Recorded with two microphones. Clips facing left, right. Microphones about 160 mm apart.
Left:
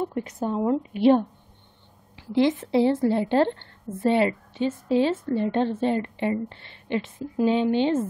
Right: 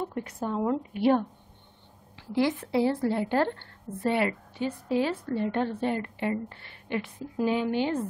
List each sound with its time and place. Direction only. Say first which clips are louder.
0.0 s a woman's voice: left 5 dB; 20° left (ahead or behind)